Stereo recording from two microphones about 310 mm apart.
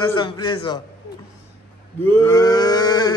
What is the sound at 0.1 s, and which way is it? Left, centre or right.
Speech, centre.